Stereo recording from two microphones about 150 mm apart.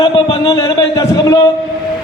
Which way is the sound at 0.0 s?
30° left (ahead or behind).